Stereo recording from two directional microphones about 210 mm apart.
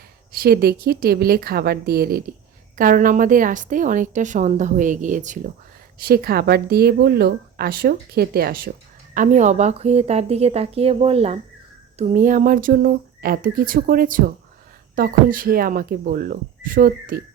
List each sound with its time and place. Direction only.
0.3 s a woman's voice: 45° right (ahead or behind)